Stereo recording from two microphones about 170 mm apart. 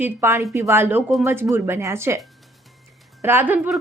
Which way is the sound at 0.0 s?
15° right (ahead or behind).